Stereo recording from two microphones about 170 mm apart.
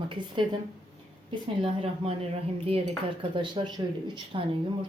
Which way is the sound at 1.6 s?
35° right (ahead or behind).